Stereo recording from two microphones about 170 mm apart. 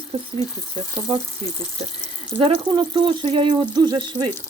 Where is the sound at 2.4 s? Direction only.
30° right (ahead or behind).